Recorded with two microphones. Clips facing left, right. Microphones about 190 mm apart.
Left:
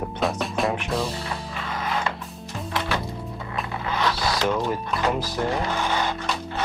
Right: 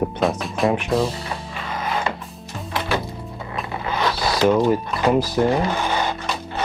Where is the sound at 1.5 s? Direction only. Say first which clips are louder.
Right 3 dB; 20° right (ahead or behind).